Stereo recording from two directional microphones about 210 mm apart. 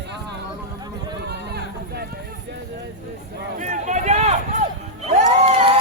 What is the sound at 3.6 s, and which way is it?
Run, 35° right (ahead or behind).